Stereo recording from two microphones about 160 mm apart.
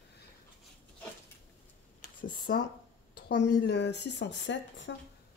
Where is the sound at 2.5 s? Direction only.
90° left.